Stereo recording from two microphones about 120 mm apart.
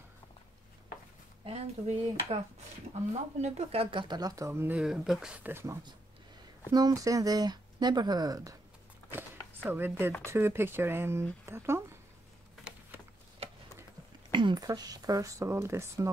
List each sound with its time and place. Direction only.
1.4 s speech: 60° right (ahead or behind); by 4.7 s 20° right (ahead or behind)
4.7 s speech: 5° right (ahead or behind)
6.7 s speech: 30° right (ahead or behind)
9.6 s speech: 15° right (ahead or behind)
14.3 s speech: 40° right (ahead or behind); by 16.1 s 20° right (ahead or behind)